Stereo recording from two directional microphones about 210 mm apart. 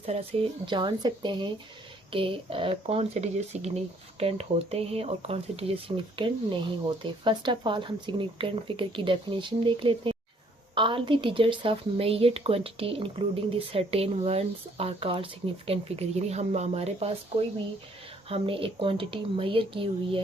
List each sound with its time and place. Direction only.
0.6 s speech: 20° right (ahead or behind)
18.3 s speech: 25° right (ahead or behind)